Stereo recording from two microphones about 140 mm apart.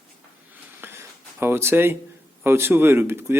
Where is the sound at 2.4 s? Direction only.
15° right (ahead or behind).